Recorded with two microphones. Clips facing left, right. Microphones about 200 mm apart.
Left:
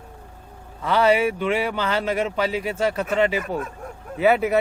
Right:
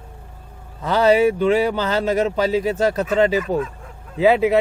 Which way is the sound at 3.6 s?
50° left (ahead or behind).